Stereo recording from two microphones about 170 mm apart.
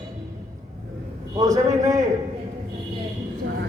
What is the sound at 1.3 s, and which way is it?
Speech, 20° right (ahead or behind).